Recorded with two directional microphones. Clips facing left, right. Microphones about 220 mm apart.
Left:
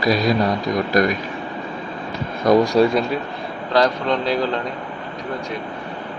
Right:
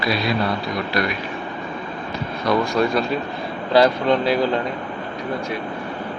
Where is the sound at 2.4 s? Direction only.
40° left (ahead or behind).